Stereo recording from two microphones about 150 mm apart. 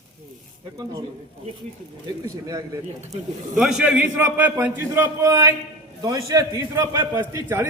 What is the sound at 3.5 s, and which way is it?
A man's voice, 5° right (ahead or behind).